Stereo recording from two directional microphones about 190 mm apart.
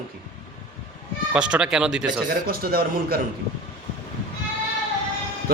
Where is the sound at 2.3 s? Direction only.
50° right (ahead or behind).